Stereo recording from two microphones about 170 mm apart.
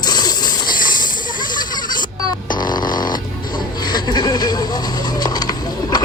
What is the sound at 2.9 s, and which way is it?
Music, 25° left (ahead or behind).